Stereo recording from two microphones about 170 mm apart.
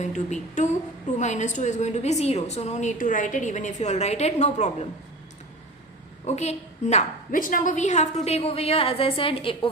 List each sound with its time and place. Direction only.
0.0 s a woman's voice: 45° left (ahead or behind)
6.2 s a woman's voice: 40° left (ahead or behind)